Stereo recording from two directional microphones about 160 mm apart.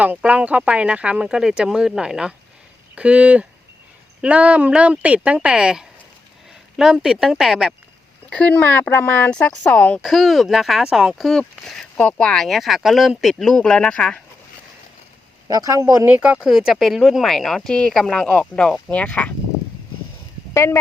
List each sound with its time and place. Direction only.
0.0 s speech: 10° right (ahead or behind)
8.3 s speech: 10° left (ahead or behind)
15.4 s speech: 20° right (ahead or behind); by 19.3 s 10° left (ahead or behind)
20.5 s speech: 15° left (ahead or behind)